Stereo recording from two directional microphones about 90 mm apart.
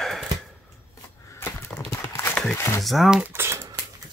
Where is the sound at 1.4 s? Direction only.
25° left (ahead or behind).